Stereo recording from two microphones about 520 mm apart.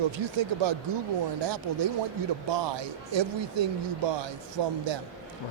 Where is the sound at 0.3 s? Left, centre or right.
Right.